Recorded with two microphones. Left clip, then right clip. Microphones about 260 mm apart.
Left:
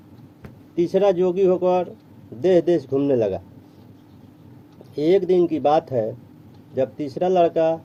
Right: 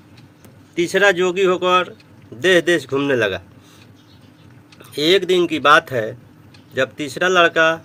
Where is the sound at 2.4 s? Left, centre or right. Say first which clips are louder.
Right 3 dB; centre.